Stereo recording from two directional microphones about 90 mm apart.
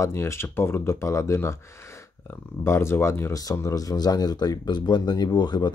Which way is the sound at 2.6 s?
30° left (ahead or behind).